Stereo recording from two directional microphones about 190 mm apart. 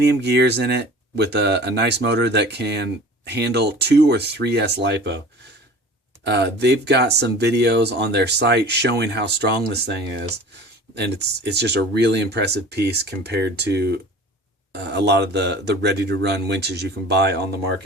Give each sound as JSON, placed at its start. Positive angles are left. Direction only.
{"t": 0.0, "sound": "speech", "side_deg": -60}
{"t": 6.2, "sound": "speech", "side_deg": -60}